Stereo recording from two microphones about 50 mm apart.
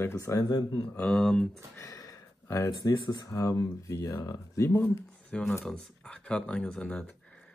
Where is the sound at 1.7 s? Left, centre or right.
Left.